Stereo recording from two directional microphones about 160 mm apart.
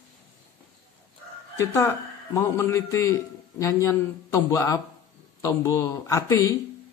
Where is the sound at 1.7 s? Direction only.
15° left (ahead or behind).